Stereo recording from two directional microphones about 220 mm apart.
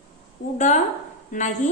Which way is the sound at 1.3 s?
35° left (ahead or behind).